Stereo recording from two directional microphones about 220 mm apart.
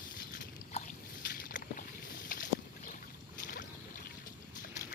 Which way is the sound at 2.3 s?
40° left (ahead or behind).